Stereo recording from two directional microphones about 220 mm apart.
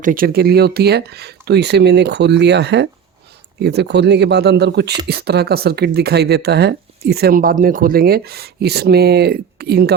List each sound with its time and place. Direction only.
0.0 s speech: 40° right (ahead or behind)